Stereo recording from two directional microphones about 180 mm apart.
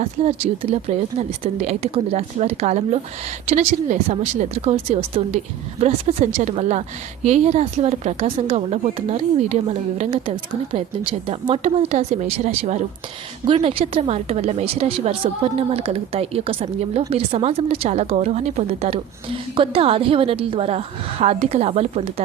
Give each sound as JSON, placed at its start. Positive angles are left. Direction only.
{"t": 0.0, "sound": "a woman's voice", "side_deg": -35}